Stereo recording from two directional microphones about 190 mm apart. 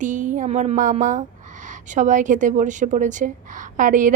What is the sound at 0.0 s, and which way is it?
A woman's voice, 40° right (ahead or behind).